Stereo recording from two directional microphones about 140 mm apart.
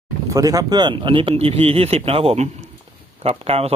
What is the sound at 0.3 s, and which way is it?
A man's voice, 25° right (ahead or behind).